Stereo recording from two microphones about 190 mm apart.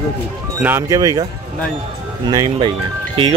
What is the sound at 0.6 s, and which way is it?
Speech, 10° right (ahead or behind).